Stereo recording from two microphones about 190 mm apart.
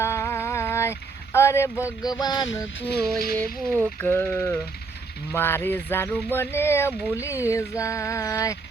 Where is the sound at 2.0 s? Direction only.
20° left (ahead or behind).